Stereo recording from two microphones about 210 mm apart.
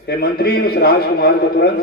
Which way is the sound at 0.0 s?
50° left (ahead or behind).